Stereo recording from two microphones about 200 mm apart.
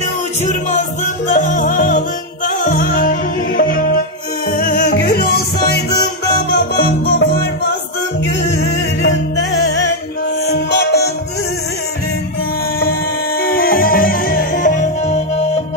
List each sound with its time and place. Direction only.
1.0 s music: 40° left (ahead or behind); by 11.1 s 55° left (ahead or behind)
13.4 s music: 50° left (ahead or behind); by 15.6 s 35° left (ahead or behind)